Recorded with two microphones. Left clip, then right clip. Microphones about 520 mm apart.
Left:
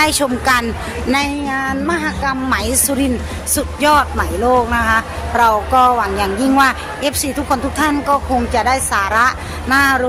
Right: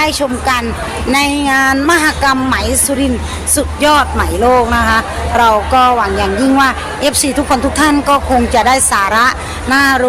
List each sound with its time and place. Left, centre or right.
0.0 s a woman's voice: left